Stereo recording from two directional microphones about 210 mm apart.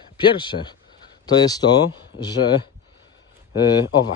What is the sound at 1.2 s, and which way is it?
Speech, 20° left (ahead or behind).